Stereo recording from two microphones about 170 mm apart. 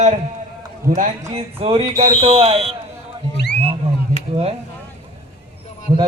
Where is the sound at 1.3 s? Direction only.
35° right (ahead or behind).